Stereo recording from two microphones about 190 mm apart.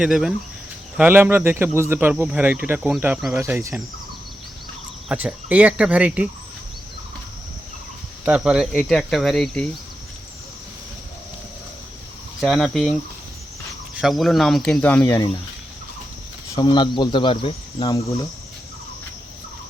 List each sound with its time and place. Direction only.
0.0 s speech: 5° right (ahead or behind)
3.4 s speech: 15° right (ahead or behind)
5.0 s speech: 5° right (ahead or behind)
8.2 s speech: 5° right (ahead or behind)
12.4 s speech: centre (ahead or behind)
16.6 s speech: 25° left (ahead or behind)